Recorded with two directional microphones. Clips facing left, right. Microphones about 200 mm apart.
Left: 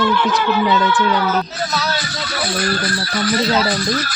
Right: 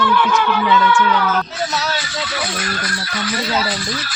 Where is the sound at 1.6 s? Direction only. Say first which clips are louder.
Even; 40° left (ahead or behind).